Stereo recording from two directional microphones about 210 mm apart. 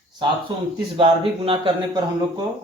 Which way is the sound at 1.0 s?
25° right (ahead or behind).